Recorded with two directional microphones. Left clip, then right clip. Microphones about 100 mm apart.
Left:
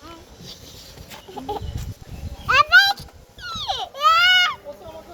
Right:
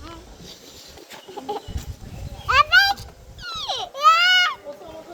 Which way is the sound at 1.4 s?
40° left (ahead or behind).